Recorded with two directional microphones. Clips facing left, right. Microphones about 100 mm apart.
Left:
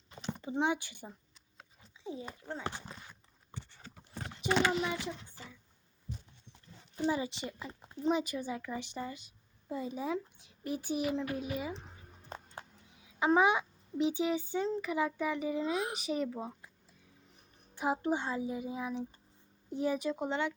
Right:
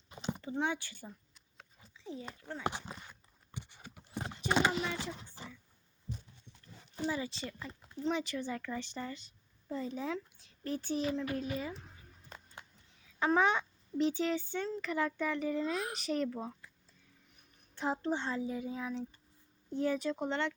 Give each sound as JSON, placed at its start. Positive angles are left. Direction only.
{"t": 0.1, "sound": "a sound", "side_deg": -10}
{"t": 0.4, "sound": "a woman's voice", "side_deg": 20}
{"t": 2.4, "sound": "speech", "side_deg": 20}
{"t": 2.6, "sound": "speech", "side_deg": -15}
{"t": 2.9, "sound": "a sound", "side_deg": 0}
{"t": 3.5, "sound": "a sound", "side_deg": -15}
{"t": 7.0, "sound": "a woman's voice", "side_deg": 20}
{"t": 12.3, "sound": "music", "side_deg": 40}
{"t": 13.1, "sound": "a woman's voice", "side_deg": 15}
{"t": 17.7, "sound": "a woman's voice", "side_deg": 10}